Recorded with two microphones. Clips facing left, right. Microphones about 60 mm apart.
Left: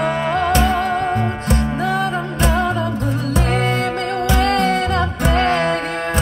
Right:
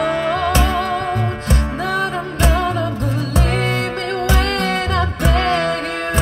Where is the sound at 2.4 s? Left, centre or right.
Right.